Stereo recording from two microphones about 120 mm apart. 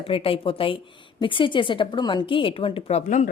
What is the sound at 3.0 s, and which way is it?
Speech, 90° left.